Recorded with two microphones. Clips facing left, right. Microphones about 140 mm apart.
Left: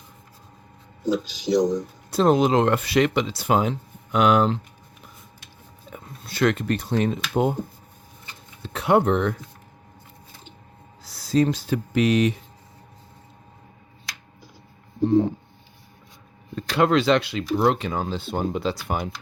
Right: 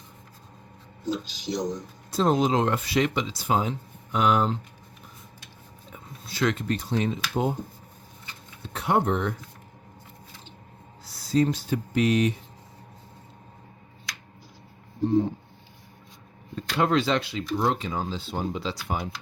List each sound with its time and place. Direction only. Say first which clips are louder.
1.0 s speech: left 6 dB; 90° left
2.0 s speech: left 4 dB; 70° left (ahead or behind)
5.9 s speech: left 4 dB; 60° left (ahead or behind)
8.6 s speech: left 5 dB; 90° left
11.0 s speech: left 3 dB; 90° left
15.0 s speech: left 4 dB; 90° left
16.6 s speech: left 4 dB; 90° left; by 19.0 s 60° left (ahead or behind)